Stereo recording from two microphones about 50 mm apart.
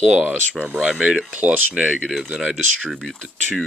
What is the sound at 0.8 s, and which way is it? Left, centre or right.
Speech, centre.